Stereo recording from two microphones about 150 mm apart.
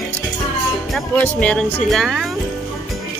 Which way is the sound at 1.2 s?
10° left (ahead or behind).